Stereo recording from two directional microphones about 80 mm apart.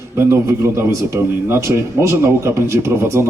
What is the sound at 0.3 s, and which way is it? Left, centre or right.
A man's voice, right.